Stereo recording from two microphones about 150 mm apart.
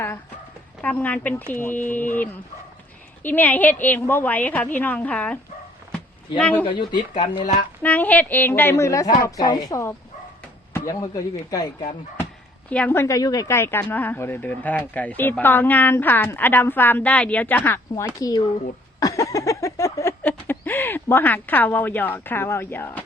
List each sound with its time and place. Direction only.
0.8 s speech: 10° left (ahead or behind)
5.9 s a sound: 5° left (ahead or behind)
6.7 s speech: 30° left (ahead or behind)
7.8 s speech: 10° left (ahead or behind); by 11.9 s 30° left (ahead or behind)
12.7 s speech: 15° left (ahead or behind)
18.9 s a sound: 20° left (ahead or behind)